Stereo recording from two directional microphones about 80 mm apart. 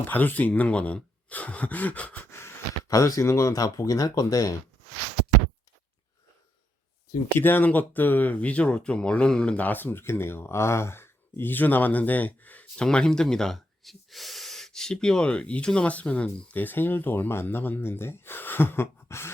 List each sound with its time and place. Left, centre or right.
0.1 s speech: left
2.3 s speech: left
7.3 s speech: left
12.7 s speech: centre; by 19.3 s left